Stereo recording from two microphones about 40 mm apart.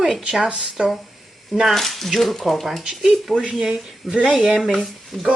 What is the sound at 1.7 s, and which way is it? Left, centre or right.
Speech, centre.